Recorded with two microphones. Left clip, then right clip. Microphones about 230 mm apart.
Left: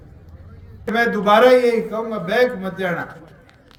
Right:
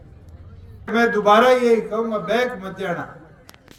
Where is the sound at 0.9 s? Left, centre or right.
Centre.